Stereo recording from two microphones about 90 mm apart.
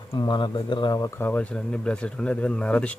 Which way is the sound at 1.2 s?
15° left (ahead or behind).